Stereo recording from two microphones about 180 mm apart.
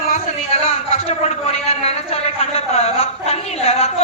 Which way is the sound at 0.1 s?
35° left (ahead or behind).